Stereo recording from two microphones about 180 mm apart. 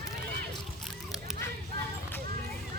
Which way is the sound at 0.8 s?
Centre (ahead or behind).